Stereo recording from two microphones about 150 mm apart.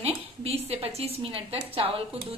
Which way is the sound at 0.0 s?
40° right (ahead or behind).